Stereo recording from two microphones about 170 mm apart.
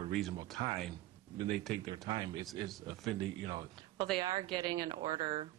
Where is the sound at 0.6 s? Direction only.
30° right (ahead or behind).